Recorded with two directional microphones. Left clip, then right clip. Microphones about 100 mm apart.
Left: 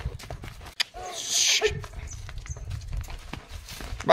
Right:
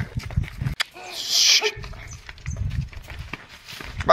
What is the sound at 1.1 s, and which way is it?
Sneeze, 15° left (ahead or behind).